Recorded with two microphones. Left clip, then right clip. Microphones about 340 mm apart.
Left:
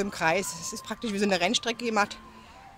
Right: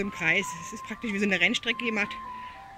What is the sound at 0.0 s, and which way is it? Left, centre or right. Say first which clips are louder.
Speech: even; left.